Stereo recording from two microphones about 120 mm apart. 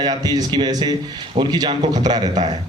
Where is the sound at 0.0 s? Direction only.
35° right (ahead or behind).